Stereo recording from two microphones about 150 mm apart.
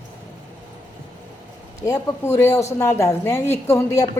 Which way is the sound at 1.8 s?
15° left (ahead or behind).